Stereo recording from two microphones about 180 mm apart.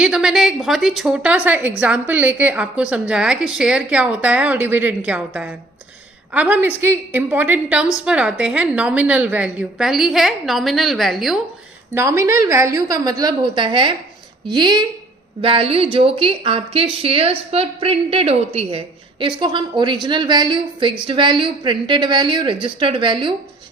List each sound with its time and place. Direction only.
0.0 s a woman's voice: 5° right (ahead or behind)
11.9 s a woman's voice: 15° right (ahead or behind)